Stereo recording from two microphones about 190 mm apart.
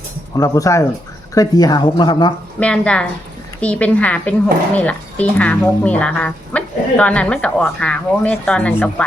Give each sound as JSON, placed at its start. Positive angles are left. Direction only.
{"t": 0.3, "sound": "speech", "side_deg": 15}
{"t": 2.6, "sound": "speech", "side_deg": 5}